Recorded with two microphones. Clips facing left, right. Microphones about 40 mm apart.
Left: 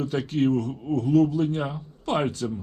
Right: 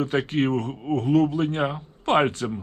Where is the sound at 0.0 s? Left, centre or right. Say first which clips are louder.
Right 1 dB; right.